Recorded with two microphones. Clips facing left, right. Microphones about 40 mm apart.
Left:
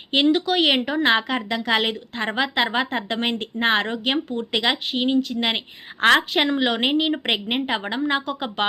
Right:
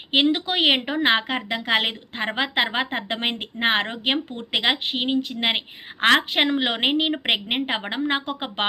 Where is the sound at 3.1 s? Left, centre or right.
Right.